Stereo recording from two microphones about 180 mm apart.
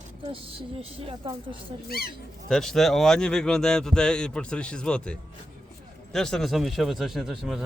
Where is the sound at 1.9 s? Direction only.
60° left (ahead or behind).